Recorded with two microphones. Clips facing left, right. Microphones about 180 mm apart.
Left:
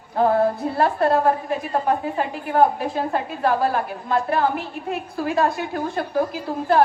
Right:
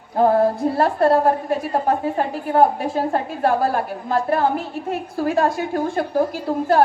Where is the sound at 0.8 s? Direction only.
40° right (ahead or behind).